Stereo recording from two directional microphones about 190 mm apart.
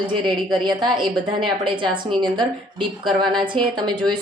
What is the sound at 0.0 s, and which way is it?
A woman's voice, 25° right (ahead or behind).